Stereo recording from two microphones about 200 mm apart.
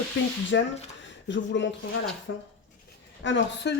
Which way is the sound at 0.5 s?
65° left (ahead or behind).